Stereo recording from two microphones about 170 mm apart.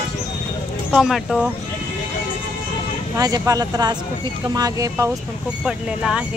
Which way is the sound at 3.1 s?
20° right (ahead or behind).